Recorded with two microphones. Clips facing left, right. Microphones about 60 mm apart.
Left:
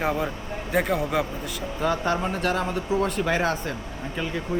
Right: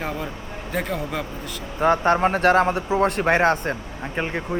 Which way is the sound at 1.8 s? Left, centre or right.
Right.